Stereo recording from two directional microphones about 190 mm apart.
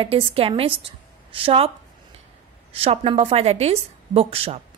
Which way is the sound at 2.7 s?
30° right (ahead or behind).